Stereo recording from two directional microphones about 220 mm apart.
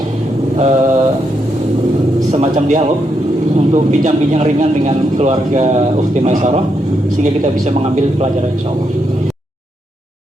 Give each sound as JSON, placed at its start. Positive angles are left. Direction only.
{"t": 0.5, "sound": "mantra", "side_deg": -30}
{"t": 2.3, "sound": "a man's voice", "side_deg": -30}